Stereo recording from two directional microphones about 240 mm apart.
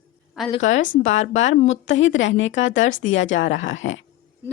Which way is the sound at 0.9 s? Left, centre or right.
Left.